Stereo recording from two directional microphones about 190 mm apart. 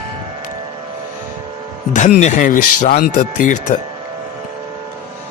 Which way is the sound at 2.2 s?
40° left (ahead or behind).